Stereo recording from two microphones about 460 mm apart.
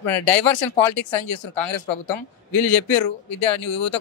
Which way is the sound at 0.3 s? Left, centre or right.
Left.